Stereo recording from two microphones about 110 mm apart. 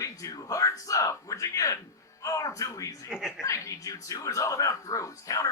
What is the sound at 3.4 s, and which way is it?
Speech, 30° left (ahead or behind).